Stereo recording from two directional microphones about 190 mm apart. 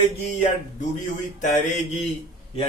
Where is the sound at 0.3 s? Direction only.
40° left (ahead or behind).